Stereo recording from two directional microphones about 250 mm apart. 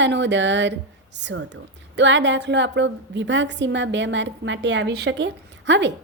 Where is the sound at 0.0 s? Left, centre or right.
Right.